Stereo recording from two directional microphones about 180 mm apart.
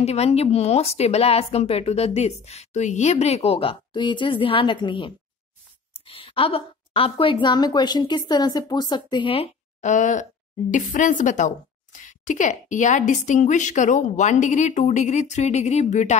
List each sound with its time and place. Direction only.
0.0 s a woman's voice: 35° left (ahead or behind)